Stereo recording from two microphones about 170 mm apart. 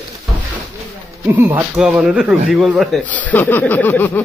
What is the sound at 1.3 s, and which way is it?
Speech, 15° right (ahead or behind).